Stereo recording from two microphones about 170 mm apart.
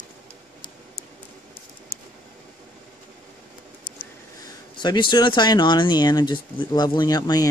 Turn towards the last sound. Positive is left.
turn(degrees=25)  # may be behind; listen again after turning